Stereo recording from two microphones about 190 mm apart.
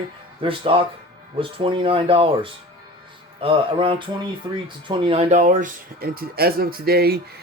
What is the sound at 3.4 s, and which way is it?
Speech, 30° right (ahead or behind).